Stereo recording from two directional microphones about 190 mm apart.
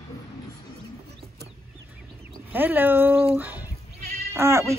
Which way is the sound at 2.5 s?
10° right (ahead or behind).